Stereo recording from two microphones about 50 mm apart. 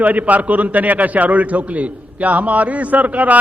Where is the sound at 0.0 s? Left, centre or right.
Right.